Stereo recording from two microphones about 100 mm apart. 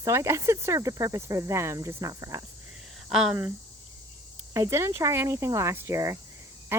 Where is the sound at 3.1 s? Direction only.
5° right (ahead or behind).